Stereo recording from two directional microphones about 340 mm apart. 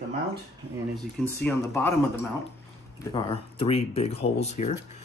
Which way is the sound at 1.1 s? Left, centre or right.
Centre.